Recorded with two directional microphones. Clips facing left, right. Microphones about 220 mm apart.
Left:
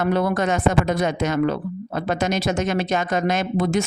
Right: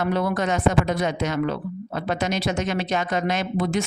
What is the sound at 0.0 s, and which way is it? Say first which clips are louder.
Speech: left 3 dB; 50° left (ahead or behind).